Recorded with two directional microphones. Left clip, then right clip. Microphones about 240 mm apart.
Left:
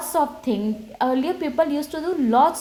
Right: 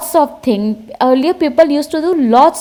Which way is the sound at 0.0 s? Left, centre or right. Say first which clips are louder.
Right 9 dB; right.